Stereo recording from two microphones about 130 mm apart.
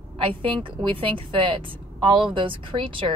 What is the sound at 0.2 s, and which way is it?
Speech, 45° right (ahead or behind).